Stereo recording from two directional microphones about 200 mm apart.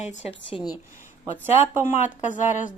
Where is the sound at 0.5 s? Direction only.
20° left (ahead or behind).